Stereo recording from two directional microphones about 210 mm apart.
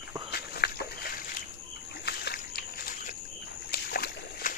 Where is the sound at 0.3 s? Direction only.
50° left (ahead or behind).